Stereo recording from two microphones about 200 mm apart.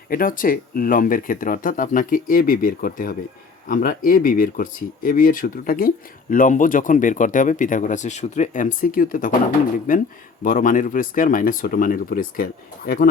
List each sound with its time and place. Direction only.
0.1 s speech: 45° left (ahead or behind)